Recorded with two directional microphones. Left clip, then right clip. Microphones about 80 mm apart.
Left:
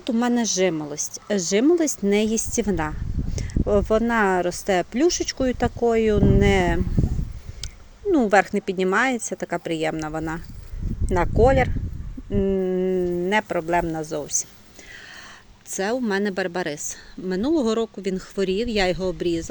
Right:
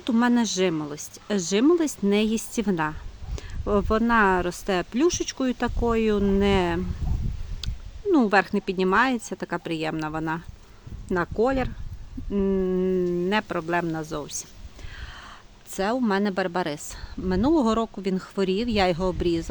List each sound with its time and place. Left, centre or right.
0.2 s a woman's voice: right
8.3 s speech: centre
12.3 s a sound: right
13.3 s a woman's voice: right
15.7 s a woman's voice: centre